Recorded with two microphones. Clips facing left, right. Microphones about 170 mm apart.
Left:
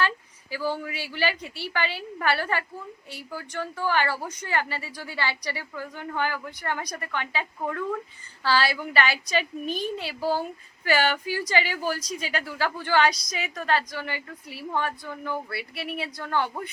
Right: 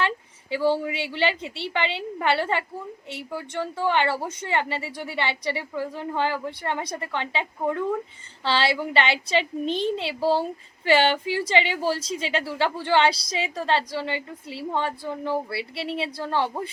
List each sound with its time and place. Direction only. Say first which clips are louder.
0.5 s a woman's voice: right 6 dB; 25° right (ahead or behind)